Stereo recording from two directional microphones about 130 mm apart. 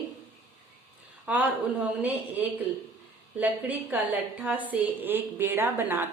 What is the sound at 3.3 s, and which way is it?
Speech, 10° right (ahead or behind).